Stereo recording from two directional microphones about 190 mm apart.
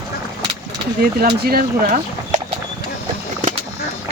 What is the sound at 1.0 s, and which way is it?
Speech, 55° right (ahead or behind).